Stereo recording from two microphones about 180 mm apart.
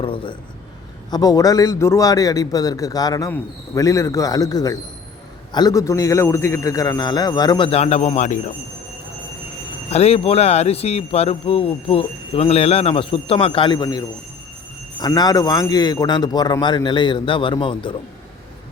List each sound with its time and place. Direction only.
0.0 s a man's voice: 30° left (ahead or behind)
9.9 s a man's voice: 35° left (ahead or behind)
15.0 s a man's voice: 20° left (ahead or behind)